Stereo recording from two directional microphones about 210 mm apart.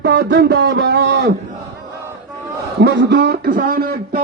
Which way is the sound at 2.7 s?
55° right (ahead or behind).